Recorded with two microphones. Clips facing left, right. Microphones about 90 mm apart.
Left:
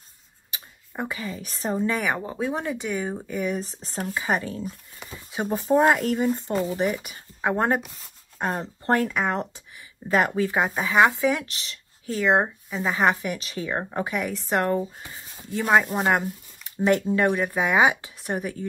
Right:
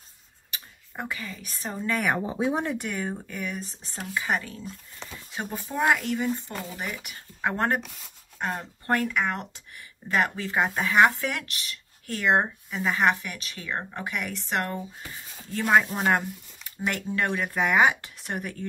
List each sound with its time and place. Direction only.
0.5 s speech: 15° left (ahead or behind)
2.0 s speech: 5° right (ahead or behind); by 3.5 s 15° left (ahead or behind)
3.5 s speech: 35° left (ahead or behind)
5.0 s a sound: 10° left (ahead or behind)
5.5 s speech: 35° left (ahead or behind)
12.3 s speech: 5° left (ahead or behind)
13.0 s speech: 25° left (ahead or behind)